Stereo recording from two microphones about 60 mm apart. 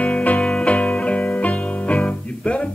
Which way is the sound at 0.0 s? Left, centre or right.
Left.